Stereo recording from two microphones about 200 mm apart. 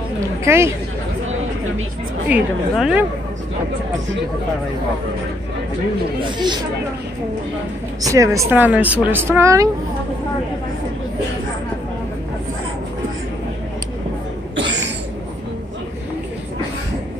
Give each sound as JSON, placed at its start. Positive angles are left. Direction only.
{"t": 0.5, "sound": "speech", "side_deg": -15}
{"t": 2.2, "sound": "speech", "side_deg": -5}
{"t": 6.3, "sound": "speech", "side_deg": -20}
{"t": 8.0, "sound": "speech", "side_deg": -15}